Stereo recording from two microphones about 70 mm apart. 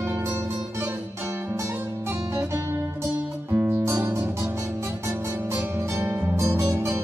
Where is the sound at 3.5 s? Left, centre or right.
Right.